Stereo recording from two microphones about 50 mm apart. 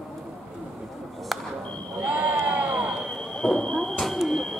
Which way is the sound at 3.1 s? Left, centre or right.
Centre.